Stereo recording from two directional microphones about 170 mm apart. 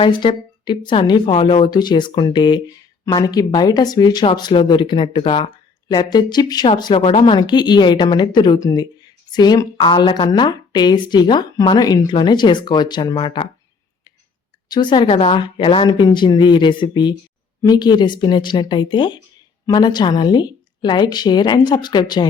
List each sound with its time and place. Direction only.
0.0 s a woman's voice: 30° left (ahead or behind)
14.7 s a woman's voice: 30° left (ahead or behind)